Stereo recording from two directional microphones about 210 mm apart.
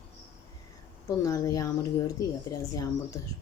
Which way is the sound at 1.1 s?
15° left (ahead or behind).